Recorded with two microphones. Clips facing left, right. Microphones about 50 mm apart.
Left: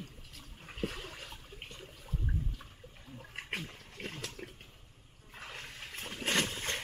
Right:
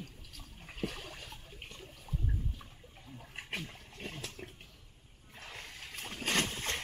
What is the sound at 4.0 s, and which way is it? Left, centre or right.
Pig, left.